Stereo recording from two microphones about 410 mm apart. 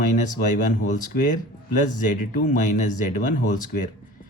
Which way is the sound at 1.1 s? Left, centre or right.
Centre.